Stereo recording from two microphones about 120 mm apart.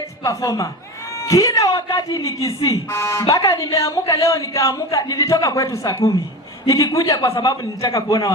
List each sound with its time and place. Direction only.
0.2 s a man's voice: 25° left (ahead or behind)